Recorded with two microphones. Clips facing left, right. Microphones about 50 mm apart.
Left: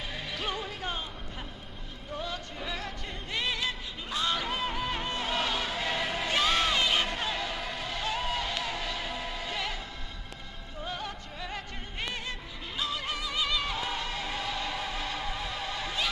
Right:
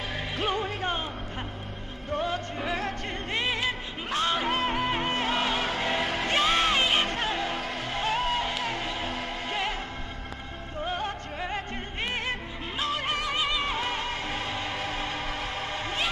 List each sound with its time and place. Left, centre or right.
0.4 s music: right
2.1 s music: right
4.3 s music: right
6.0 s music: right
6.3 s music: right
10.8 s music: right
12.2 s music: right
13.5 s music: right